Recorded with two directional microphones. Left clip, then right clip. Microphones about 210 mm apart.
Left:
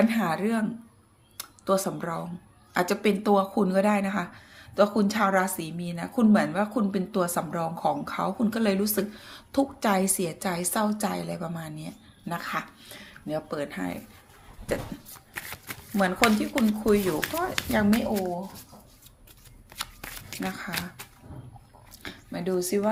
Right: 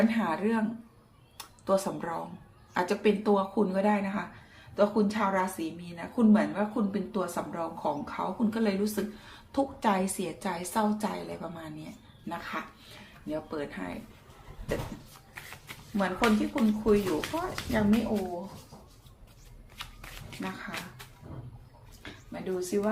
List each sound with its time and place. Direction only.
0.1 s a woman's voice: 35° left (ahead or behind)
15.4 s speech: 45° left (ahead or behind)
19.7 s shuffling cards: 50° left (ahead or behind)
22.0 s speech: 45° left (ahead or behind)